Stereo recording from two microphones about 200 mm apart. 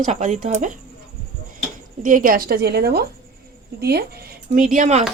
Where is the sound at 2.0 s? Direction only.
45° right (ahead or behind).